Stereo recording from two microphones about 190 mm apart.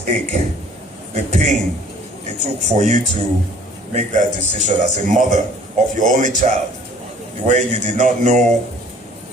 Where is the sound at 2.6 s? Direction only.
35° right (ahead or behind).